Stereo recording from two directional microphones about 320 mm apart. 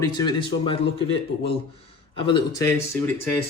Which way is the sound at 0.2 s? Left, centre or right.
Centre.